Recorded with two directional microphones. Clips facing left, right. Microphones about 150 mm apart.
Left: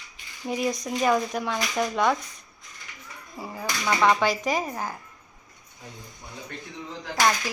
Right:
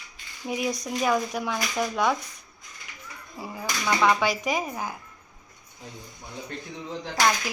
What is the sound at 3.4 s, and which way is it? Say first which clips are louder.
Speech: left 1 dB; centre (ahead or behind).